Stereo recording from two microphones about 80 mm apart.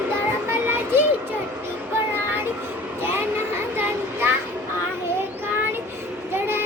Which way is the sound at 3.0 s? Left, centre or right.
Right.